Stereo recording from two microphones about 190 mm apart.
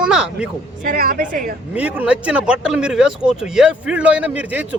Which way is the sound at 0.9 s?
50° right (ahead or behind).